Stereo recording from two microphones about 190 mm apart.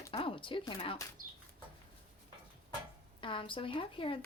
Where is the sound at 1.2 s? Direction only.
45° right (ahead or behind).